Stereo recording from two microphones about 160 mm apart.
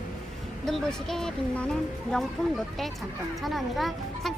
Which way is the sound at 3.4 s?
Centre (ahead or behind).